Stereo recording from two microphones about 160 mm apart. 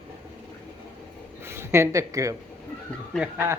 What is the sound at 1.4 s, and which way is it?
Speech, 15° right (ahead or behind).